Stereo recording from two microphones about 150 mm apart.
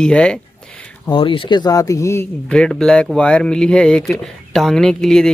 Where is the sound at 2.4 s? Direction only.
5° left (ahead or behind).